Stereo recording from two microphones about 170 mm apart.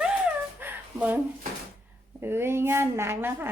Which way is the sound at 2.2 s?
15° right (ahead or behind).